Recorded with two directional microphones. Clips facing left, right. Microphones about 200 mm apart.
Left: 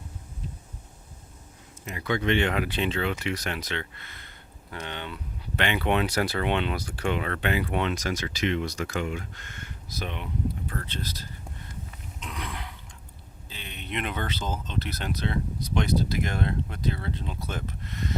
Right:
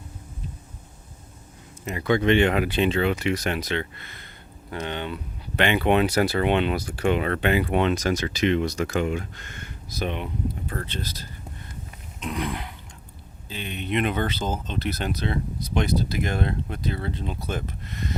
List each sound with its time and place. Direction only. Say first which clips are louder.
1.8 s speech: right 6 dB; 30° right (ahead or behind)
2.3 s speech: right 4 dB; 15° right (ahead or behind)
4.9 s speech: right 6 dB; 20° right (ahead or behind)
10.7 s speech: right 3 dB; 35° right (ahead or behind)
12.2 s speech: right 9 dB; 15° right (ahead or behind)
13.7 s speech: right 8 dB; 15° right (ahead or behind)
14.3 s speech: right 4 dB; 50° right (ahead or behind)
14.7 s speech: right 4 dB; 15° right (ahead or behind)